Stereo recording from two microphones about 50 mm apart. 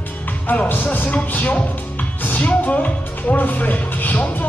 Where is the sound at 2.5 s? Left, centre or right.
Left.